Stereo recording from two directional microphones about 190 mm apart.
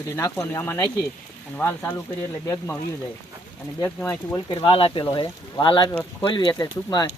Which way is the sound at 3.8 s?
15° left (ahead or behind).